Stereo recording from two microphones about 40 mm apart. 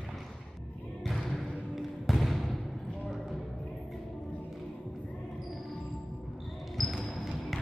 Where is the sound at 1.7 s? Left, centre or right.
Centre.